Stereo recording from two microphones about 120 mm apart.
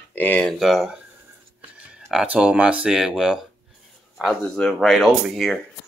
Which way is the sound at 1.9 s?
5° right (ahead or behind).